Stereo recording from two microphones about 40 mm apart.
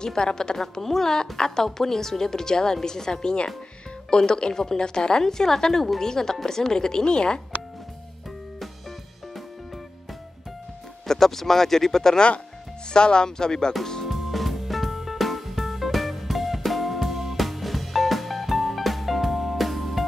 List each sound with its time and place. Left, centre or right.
0.0 s a woman's voice: centre
11.1 s a woman's voice: centre
12.9 s speech: left
14.0 s music: centre